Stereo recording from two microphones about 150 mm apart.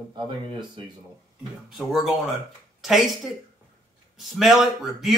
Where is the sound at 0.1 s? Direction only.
30° right (ahead or behind).